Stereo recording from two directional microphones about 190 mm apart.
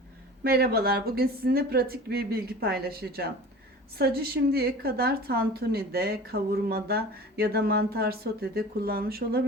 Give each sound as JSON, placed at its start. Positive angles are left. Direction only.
{"t": 0.4, "sound": "a woman's voice", "side_deg": -55}